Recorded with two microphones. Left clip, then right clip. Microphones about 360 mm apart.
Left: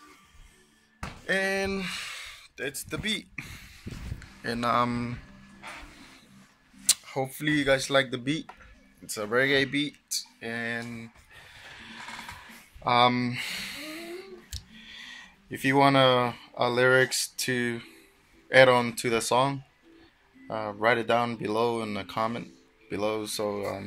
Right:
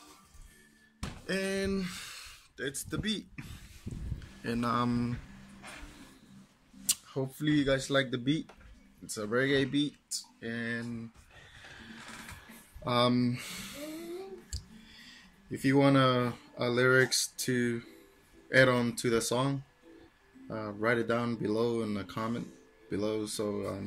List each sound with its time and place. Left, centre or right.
1.2 s speech: centre
4.5 s speech: centre
6.9 s a sound: centre
7.5 s speech: centre
9.2 s speech: centre
12.8 s speech: centre
14.5 s music: centre
15.6 s speech: centre
20.5 s speech: centre